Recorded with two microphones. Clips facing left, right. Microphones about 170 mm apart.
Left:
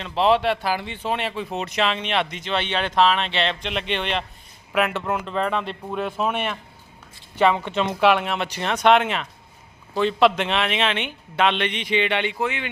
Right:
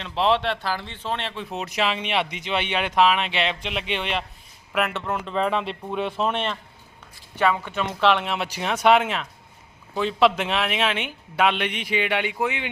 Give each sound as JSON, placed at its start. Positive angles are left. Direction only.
{"t": 0.0, "sound": "speech", "side_deg": 0}
{"t": 1.5, "sound": "speech", "side_deg": -5}
{"t": 7.3, "sound": "speech", "side_deg": 20}
{"t": 8.0, "sound": "speech", "side_deg": 5}